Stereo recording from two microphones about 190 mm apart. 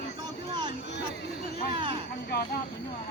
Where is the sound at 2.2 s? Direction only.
55° left (ahead or behind).